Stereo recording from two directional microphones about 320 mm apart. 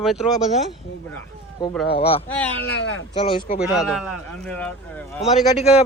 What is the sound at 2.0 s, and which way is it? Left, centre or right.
Speech, centre.